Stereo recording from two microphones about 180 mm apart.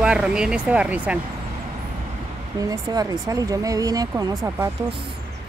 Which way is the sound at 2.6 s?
20° right (ahead or behind).